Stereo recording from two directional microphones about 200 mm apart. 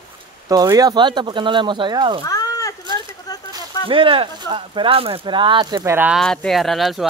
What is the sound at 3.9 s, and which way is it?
Speech, 25° right (ahead or behind).